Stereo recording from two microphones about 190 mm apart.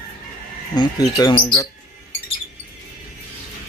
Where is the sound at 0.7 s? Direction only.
20° left (ahead or behind).